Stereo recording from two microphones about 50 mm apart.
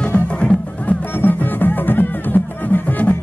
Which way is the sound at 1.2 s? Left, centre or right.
Left.